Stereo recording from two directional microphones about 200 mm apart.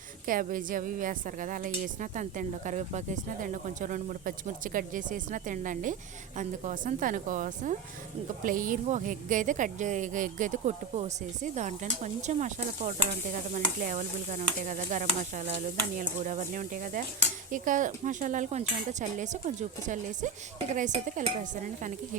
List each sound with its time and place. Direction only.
0.3 s a woman's voice: 45° right (ahead or behind)